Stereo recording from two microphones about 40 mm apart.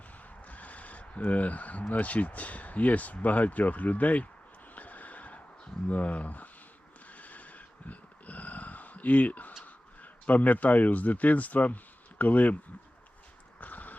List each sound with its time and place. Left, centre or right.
0.4 s vehicle: left
1.9 s speech: left
4.7 s a sound: left
5.9 s speech: left
7.2 s a sound: left
10.0 s speech: left
13.6 s horse: left